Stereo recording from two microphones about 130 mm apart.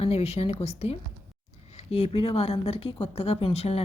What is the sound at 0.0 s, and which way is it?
A woman's voice, 50° left (ahead or behind).